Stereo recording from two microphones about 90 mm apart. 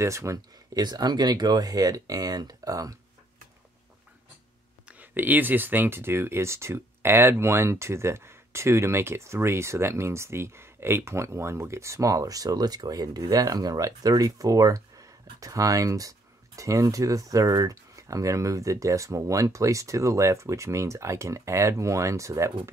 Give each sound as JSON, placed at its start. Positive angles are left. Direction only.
{"t": 0.0, "sound": "speech", "side_deg": -35}
{"t": 0.8, "sound": "speech", "side_deg": -50}
{"t": 5.1, "sound": "speech", "side_deg": -20}